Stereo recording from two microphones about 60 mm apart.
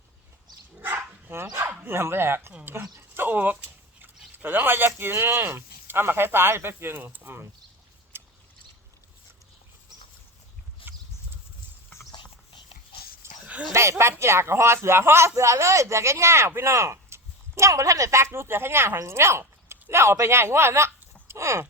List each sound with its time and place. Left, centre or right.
0.9 s dog: right
1.9 s speech: right
3.2 s a sound: right
4.4 s speech: right
8.1 s a sound: right
13.4 s dog: right
13.7 s speech: right